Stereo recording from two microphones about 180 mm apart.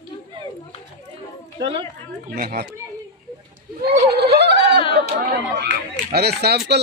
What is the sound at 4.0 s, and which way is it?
Speech, 65° right (ahead or behind).